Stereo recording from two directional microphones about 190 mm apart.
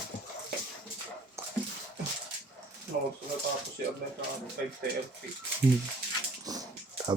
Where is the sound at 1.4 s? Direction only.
15° right (ahead or behind).